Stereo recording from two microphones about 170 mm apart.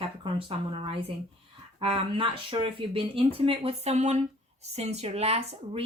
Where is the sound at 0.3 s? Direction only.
30° right (ahead or behind).